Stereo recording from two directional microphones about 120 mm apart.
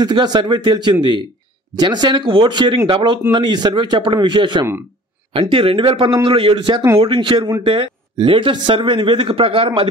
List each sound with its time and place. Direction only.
0.0 s a man's voice: 40° right (ahead or behind)